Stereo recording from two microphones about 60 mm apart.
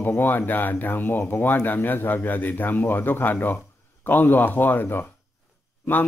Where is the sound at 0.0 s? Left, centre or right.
Left.